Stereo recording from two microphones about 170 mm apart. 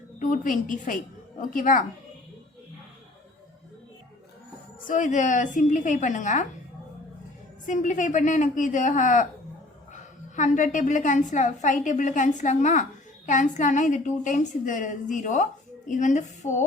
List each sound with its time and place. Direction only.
0.2 s a woman's voice: 50° left (ahead or behind)
4.9 s a woman's voice: 50° left (ahead or behind)
7.7 s a woman's voice: 50° left (ahead or behind)